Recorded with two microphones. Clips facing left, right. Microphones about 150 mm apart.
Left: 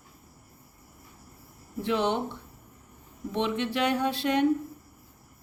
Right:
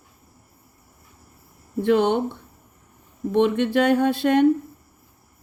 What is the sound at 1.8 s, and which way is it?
Speech, 55° right (ahead or behind).